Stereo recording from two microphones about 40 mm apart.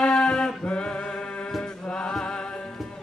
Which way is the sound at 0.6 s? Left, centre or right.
Left.